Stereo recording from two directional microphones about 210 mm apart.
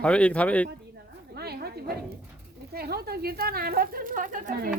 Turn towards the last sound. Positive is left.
turn(degrees=-40)  # may be behind; listen again after turning